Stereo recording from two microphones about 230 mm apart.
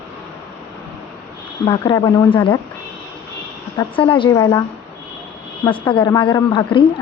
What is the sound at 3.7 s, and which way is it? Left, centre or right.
Speech, left.